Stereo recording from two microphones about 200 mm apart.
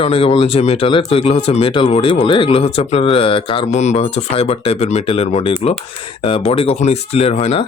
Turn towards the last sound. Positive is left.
turn(degrees=30)  # may be behind; listen again after turning